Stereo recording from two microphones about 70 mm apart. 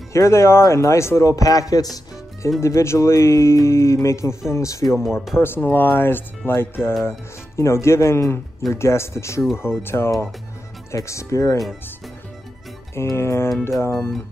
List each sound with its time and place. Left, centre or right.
0.1 s speech: left
1.3 s speech: left
2.6 s speech: left
4.8 s speech: centre
5.6 s speech: left
12.9 s speech: left